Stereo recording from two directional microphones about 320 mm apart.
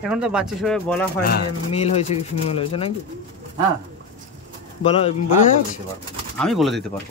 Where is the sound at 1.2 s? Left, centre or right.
Left.